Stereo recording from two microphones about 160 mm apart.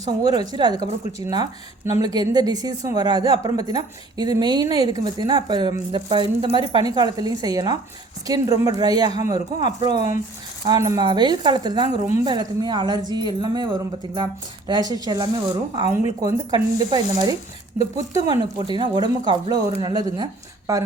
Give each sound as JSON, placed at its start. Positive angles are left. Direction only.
{"t": 0.2, "sound": "a woman's voice", "side_deg": -25}